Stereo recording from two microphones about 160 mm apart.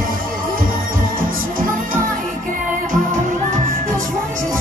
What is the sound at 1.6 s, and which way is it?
Music, 60° right (ahead or behind).